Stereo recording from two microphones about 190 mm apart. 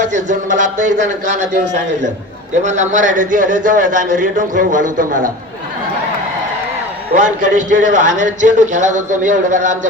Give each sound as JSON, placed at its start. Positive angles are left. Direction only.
{"t": 0.0, "sound": "a man's voice", "side_deg": -40}
{"t": 2.6, "sound": "a man's voice", "side_deg": -40}
{"t": 7.1, "sound": "a man's voice", "side_deg": -40}